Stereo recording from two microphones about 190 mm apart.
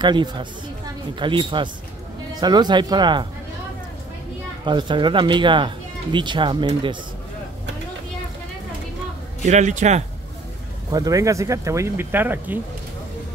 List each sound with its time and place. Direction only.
0.0 s speech: 25° right (ahead or behind)
4.6 s speech: 25° right (ahead or behind)
9.4 s speech: 40° right (ahead or behind)
10.9 s speech: 20° right (ahead or behind)